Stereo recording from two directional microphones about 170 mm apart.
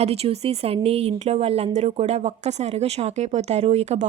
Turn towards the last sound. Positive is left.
turn(degrees=-40)  # may be behind; listen again after turning